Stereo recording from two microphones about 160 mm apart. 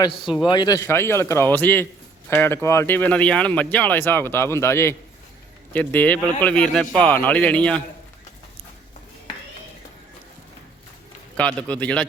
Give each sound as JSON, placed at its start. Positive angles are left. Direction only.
{"t": 0.4, "sound": "speech", "side_deg": 25}
{"t": 11.3, "sound": "speech", "side_deg": 10}